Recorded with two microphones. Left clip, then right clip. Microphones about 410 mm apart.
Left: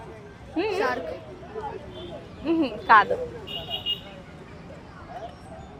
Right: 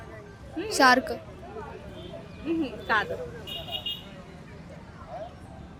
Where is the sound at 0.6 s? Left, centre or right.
Centre.